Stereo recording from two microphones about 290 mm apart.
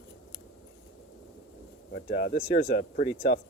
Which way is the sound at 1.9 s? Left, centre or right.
Left.